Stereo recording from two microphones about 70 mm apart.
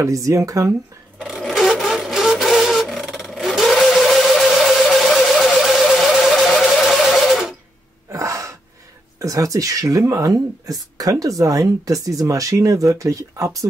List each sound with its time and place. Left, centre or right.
0.0 s speech: right
1.5 s a sound: centre
8.1 s gasp: right
9.2 s speech: right